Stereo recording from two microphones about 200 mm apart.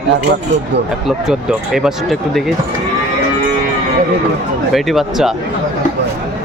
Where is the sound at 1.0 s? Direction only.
5° right (ahead or behind).